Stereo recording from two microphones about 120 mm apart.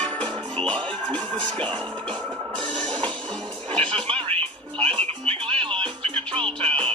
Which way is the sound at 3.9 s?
50° right (ahead or behind).